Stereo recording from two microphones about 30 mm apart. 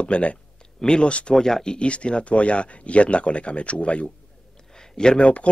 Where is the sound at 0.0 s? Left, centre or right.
Left.